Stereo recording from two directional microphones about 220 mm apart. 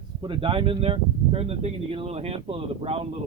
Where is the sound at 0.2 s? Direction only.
20° right (ahead or behind).